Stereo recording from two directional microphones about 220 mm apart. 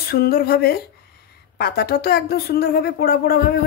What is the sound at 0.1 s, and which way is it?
Speech, 45° left (ahead or behind).